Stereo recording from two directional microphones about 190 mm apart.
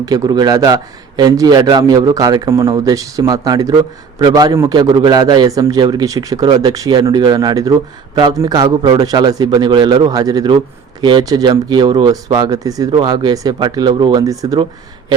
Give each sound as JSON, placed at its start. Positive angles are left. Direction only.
{"t": 0.0, "sound": "a man's voice", "side_deg": -20}